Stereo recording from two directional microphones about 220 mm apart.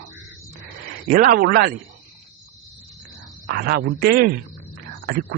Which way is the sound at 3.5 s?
45° right (ahead or behind).